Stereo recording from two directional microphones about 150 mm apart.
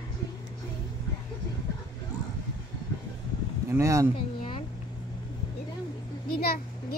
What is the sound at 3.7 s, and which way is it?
Speech, 20° right (ahead or behind).